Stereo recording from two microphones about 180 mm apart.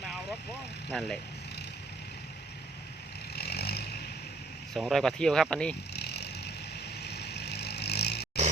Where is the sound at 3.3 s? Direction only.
60° left (ahead or behind).